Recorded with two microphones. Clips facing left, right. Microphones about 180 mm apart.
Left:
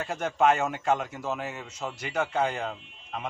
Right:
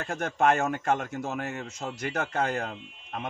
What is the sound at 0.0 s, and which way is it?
A man's voice, 50° right (ahead or behind).